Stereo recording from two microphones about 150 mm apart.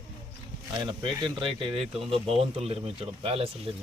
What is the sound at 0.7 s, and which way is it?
A man's voice, 30° right (ahead or behind).